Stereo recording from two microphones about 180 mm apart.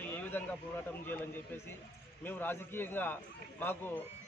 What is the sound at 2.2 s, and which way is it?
A man's voice, 10° left (ahead or behind).